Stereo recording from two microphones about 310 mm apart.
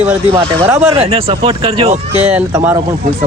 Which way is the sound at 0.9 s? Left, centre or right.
Centre.